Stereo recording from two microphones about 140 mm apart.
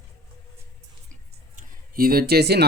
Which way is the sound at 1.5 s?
70° right (ahead or behind).